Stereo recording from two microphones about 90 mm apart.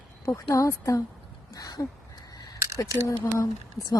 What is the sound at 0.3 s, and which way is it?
A woman's voice, 35° left (ahead or behind).